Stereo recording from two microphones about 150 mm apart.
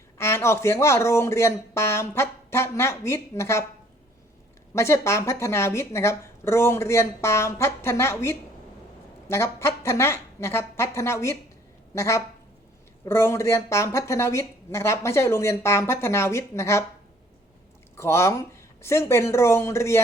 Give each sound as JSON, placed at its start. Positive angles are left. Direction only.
{"t": 0.2, "sound": "speech", "side_deg": 15}
{"t": 4.7, "sound": "speech", "side_deg": 20}
{"t": 17.9, "sound": "speech", "side_deg": 20}